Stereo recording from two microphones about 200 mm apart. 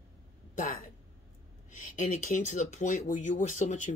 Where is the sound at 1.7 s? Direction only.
40° left (ahead or behind).